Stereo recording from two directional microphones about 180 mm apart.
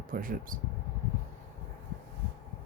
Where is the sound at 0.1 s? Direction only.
50° right (ahead or behind).